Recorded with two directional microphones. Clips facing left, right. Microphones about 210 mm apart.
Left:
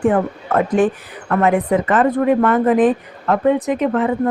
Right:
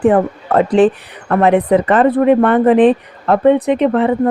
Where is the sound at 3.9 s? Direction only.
35° right (ahead or behind).